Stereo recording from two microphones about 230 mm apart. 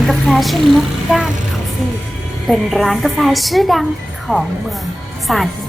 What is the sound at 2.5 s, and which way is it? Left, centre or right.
A woman's voice, centre.